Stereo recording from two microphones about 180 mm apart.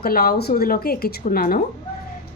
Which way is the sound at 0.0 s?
55° left (ahead or behind).